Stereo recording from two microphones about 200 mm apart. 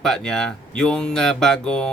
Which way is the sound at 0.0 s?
5° left (ahead or behind).